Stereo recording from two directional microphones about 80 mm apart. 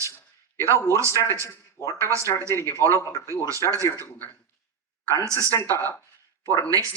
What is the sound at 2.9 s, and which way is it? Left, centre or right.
Speech, left.